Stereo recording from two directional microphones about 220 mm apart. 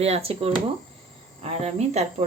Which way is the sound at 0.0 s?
25° right (ahead or behind).